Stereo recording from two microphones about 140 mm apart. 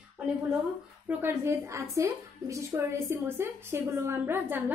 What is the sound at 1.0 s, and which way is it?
A woman's voice, 15° right (ahead or behind).